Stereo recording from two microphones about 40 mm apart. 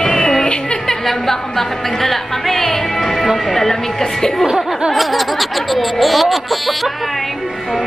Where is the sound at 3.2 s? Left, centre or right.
Centre.